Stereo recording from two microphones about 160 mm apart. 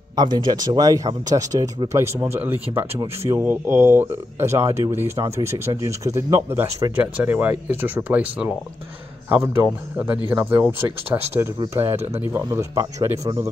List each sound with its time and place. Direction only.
0.1 s speech: 25° right (ahead or behind)